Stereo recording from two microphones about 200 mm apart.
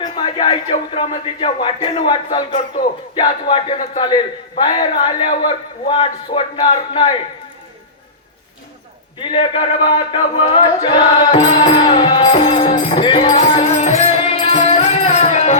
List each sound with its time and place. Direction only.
0.0 s a man's voice: 20° left (ahead or behind)
9.1 s speech: 25° left (ahead or behind)